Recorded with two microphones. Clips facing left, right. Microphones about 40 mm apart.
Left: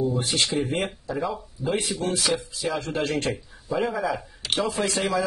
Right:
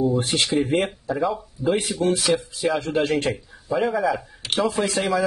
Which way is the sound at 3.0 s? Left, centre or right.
Right.